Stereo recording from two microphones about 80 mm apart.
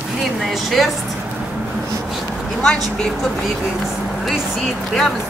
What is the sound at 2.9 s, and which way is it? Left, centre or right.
Speech, centre.